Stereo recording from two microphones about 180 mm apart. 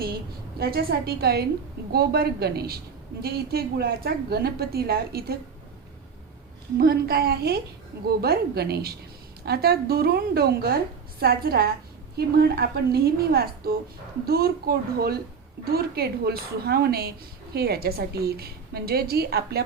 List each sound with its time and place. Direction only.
0.6 s a woman's voice: 55° right (ahead or behind)
6.7 s a woman's voice: 60° right (ahead or behind)